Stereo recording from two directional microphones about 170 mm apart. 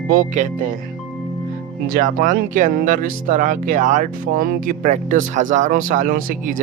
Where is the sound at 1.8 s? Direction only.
55° right (ahead or behind).